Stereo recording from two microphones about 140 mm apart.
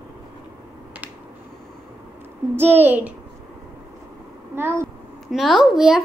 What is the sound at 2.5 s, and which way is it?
Speech, 15° right (ahead or behind).